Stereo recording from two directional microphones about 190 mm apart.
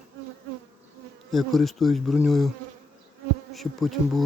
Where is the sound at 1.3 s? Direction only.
Centre (ahead or behind).